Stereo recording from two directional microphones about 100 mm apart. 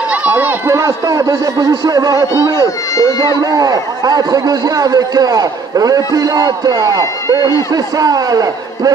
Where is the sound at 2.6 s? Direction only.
35° left (ahead or behind).